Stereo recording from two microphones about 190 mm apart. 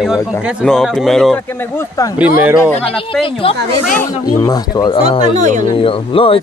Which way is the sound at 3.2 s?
30° left (ahead or behind).